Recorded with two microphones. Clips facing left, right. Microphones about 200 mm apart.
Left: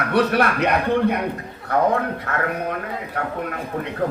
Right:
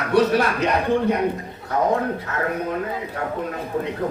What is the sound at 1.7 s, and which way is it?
Speech, 60° left (ahead or behind).